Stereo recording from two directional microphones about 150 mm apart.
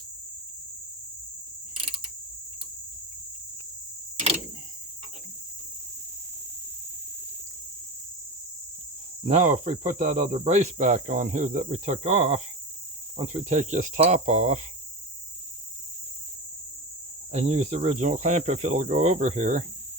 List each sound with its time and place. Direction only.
9.2 s speech: 50° right (ahead or behind)
17.3 s speech: 50° right (ahead or behind)